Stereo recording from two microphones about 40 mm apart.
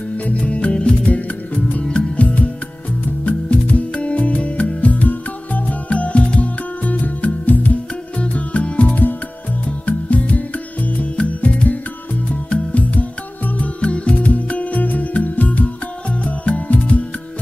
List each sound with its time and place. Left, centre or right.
0.2 s music: left
8.2 s music: left
13.7 s music: left